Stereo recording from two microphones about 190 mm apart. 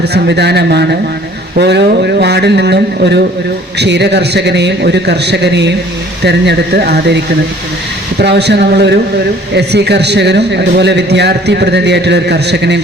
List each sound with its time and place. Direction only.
0.0 s a man's voice: 60° right (ahead or behind)